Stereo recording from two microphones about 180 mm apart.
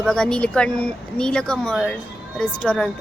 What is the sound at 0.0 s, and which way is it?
A woman's voice, 5° left (ahead or behind).